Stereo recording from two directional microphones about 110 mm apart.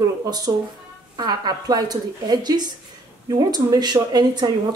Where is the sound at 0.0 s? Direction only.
35° right (ahead or behind).